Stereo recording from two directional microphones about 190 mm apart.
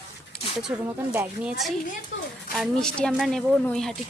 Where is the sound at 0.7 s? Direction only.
10° right (ahead or behind).